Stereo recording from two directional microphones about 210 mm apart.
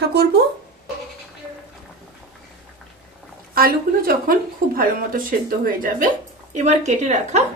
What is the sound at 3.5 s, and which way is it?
A woman's voice, 45° right (ahead or behind).